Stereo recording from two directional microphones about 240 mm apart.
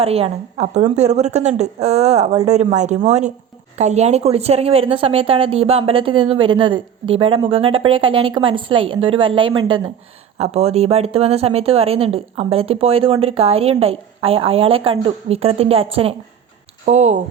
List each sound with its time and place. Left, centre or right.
0.0 s speech: right